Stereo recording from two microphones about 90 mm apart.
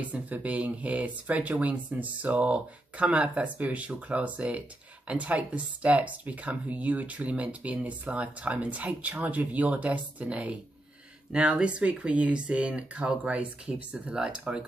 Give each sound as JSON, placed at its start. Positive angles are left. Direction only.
{"t": 0.1, "sound": "speech", "side_deg": -15}